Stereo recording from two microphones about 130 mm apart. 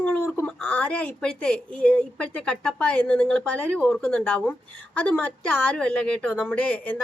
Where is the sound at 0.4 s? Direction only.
10° left (ahead or behind).